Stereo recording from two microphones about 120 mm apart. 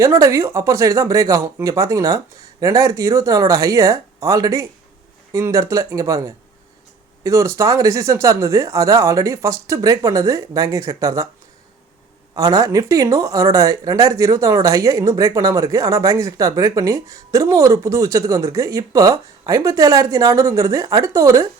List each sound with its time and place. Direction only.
0.0 s speech: 25° right (ahead or behind)
12.3 s speech: 30° right (ahead or behind)